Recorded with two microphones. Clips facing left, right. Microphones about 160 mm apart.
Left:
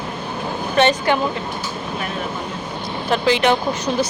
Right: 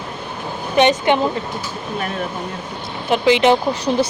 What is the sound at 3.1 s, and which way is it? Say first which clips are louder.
Speech: right 3 dB; 20° right (ahead or behind).